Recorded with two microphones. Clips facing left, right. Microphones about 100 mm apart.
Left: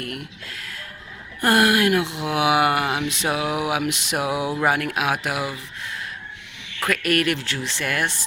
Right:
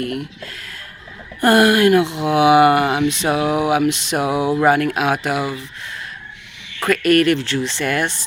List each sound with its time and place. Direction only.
0.0 s speech: centre (ahead or behind)